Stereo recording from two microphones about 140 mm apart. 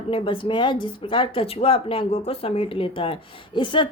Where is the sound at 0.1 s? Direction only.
40° left (ahead or behind).